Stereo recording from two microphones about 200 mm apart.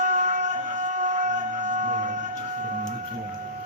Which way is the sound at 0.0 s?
40° right (ahead or behind).